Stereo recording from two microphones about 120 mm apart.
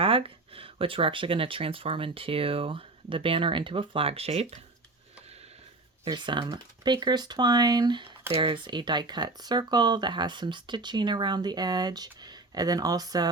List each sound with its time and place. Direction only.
0.0 s speech: 50° right (ahead or behind)
6.1 s speech: 40° right (ahead or behind)
8.3 s speech: 45° right (ahead or behind); by 13.2 s 30° right (ahead or behind)